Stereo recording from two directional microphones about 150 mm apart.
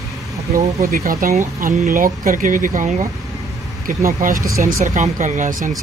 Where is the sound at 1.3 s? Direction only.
50° right (ahead or behind).